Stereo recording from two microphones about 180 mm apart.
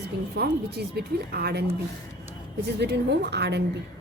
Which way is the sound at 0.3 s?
60° right (ahead or behind).